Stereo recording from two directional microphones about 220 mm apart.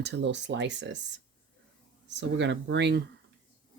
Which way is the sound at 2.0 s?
55° right (ahead or behind).